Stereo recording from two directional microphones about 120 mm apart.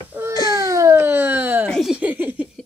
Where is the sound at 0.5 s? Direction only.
25° right (ahead or behind).